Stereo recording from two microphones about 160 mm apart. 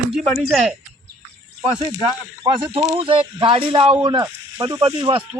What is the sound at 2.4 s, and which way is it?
A man's voice, 30° right (ahead or behind).